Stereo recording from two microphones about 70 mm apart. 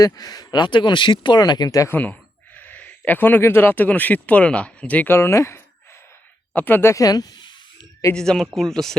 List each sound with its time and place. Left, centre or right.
0.0 s speech: left
1.9 s speech: left
5.0 s a sound: left
6.5 s speech: left
6.9 s a sound: left
8.1 s speech: centre